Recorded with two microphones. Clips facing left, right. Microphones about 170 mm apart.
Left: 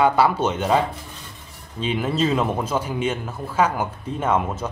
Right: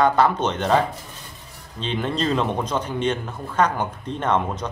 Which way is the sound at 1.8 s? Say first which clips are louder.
Left 2 dB; 5° left (ahead or behind).